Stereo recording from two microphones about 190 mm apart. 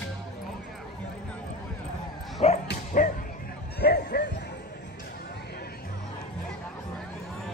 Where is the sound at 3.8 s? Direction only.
55° left (ahead or behind).